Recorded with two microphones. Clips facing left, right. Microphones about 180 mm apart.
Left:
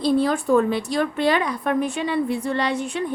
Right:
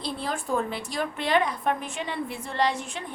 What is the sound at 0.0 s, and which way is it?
A woman's voice, 70° left (ahead or behind).